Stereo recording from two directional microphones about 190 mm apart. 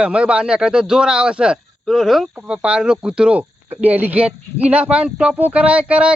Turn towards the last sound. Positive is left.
turn(degrees=-5)  # may be behind; listen again after turning